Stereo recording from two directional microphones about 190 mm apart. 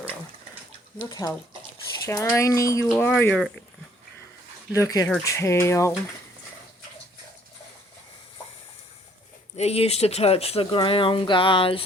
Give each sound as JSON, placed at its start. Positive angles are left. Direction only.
{"t": 2.0, "sound": "speech", "side_deg": 15}
{"t": 4.7, "sound": "speech", "side_deg": 15}
{"t": 9.6, "sound": "speech", "side_deg": 35}